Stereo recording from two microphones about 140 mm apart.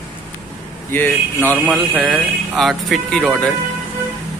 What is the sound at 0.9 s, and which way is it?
Speech, 15° left (ahead or behind).